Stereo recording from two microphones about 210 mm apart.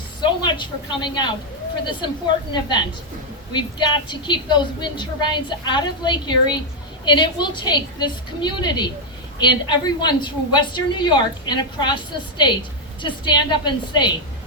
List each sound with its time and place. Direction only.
0.2 s a woman's voice: 20° left (ahead or behind)
2.5 s a woman's voice: 20° left (ahead or behind)